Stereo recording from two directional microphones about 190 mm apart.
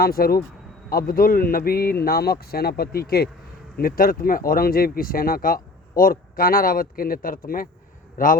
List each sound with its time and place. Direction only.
0.0 s a man's voice: 50° left (ahead or behind)